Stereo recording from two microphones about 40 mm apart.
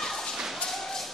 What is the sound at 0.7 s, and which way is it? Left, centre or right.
Tap, centre.